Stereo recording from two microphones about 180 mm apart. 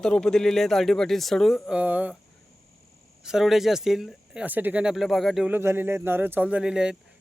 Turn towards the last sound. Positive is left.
turn(degrees=-5)  # may be behind; listen again after turning